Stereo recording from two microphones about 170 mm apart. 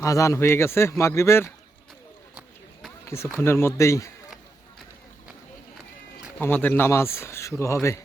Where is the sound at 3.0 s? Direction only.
15° left (ahead or behind).